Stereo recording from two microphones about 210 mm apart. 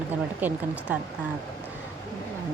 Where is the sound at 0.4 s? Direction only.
10° right (ahead or behind).